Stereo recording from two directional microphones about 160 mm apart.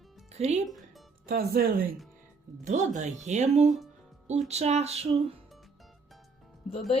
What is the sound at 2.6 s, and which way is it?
Speech, 50° right (ahead or behind).